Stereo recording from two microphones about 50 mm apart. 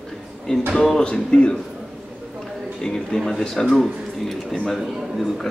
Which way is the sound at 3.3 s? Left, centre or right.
Centre.